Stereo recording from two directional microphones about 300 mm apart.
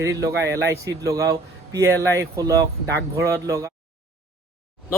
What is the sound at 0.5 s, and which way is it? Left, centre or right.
Speech, centre.